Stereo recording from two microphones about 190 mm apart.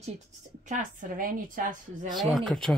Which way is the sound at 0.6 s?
45° right (ahead or behind).